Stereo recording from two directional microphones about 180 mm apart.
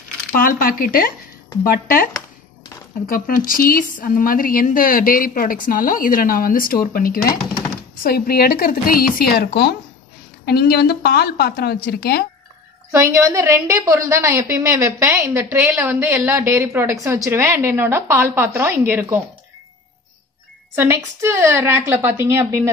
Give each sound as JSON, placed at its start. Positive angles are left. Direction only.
{"t": 0.4, "sound": "a woman's voice", "side_deg": 55}
{"t": 3.1, "sound": "a woman's voice", "side_deg": 50}
{"t": 12.9, "sound": "a woman's voice", "side_deg": -15}
{"t": 20.7, "sound": "a woman's voice", "side_deg": -15}